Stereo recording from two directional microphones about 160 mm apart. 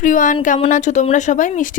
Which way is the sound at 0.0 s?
55° left (ahead or behind).